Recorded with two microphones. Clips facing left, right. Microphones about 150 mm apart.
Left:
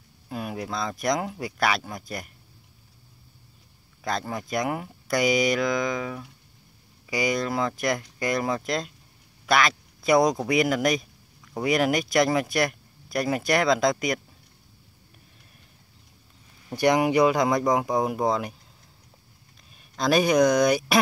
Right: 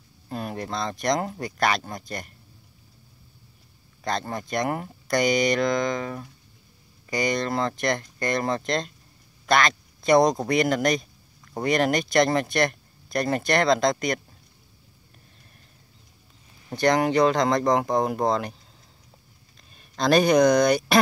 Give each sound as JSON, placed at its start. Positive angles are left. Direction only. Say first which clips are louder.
{"t": 0.3, "sound": "speech", "louder": "right 1 dB", "side_deg": 5}
{"t": 4.0, "sound": "speech", "louder": "right 1 dB", "side_deg": 5}
{"t": 16.7, "sound": "speech", "louder": "even", "side_deg": 10}
{"t": 19.7, "sound": "speech", "louder": "right 2 dB", "side_deg": 5}